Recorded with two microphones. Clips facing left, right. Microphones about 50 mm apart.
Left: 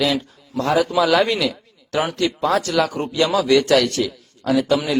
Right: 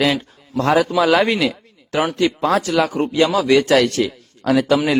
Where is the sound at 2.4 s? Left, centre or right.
Right.